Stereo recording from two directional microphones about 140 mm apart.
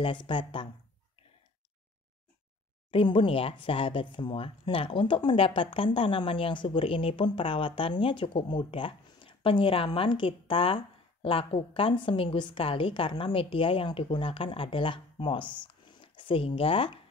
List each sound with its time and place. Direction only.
0.0 s speech: 35° left (ahead or behind)
2.9 s speech: 40° left (ahead or behind)